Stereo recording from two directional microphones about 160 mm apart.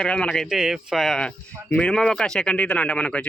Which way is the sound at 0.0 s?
5° left (ahead or behind).